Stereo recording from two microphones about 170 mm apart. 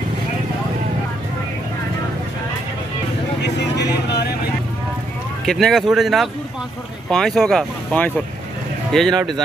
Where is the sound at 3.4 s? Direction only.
75° left (ahead or behind).